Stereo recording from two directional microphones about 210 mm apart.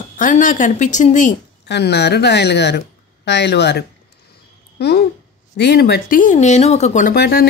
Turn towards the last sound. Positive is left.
turn(degrees=50)  # may be behind; listen again after turning